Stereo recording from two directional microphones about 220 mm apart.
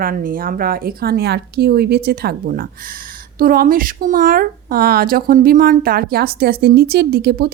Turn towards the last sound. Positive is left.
turn(degrees=-45)  # may be behind; listen again after turning